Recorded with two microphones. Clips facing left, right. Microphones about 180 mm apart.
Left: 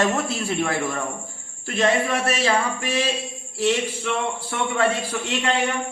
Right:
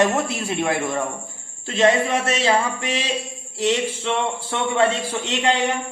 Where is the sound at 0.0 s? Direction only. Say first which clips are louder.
Right 2 dB; 20° right (ahead or behind).